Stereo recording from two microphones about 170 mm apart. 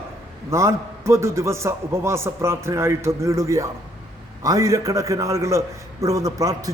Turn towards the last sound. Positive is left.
turn(degrees=-20)  # may be behind; listen again after turning